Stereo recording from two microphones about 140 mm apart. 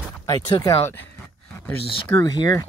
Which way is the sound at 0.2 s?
25° left (ahead or behind).